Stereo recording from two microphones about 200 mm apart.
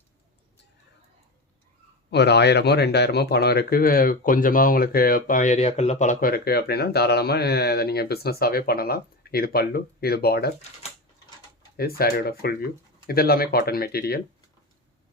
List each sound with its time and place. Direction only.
2.0 s speech: 55° left (ahead or behind)
11.8 s speech: 50° left (ahead or behind)